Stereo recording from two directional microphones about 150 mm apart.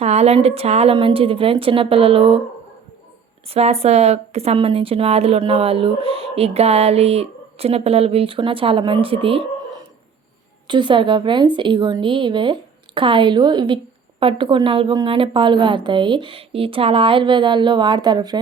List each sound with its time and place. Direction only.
0.0 s a woman's voice: 45° right (ahead or behind)
3.5 s a woman's voice: 45° right (ahead or behind); by 18.3 s 30° right (ahead or behind)